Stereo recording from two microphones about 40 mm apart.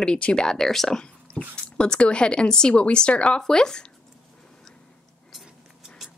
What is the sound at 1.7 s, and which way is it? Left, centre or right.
Speech, left.